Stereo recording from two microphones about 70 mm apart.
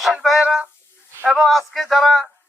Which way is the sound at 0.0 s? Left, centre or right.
Centre.